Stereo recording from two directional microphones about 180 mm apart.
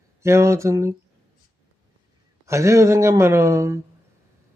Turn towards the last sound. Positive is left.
turn(degrees=-15)  # may be behind; listen again after turning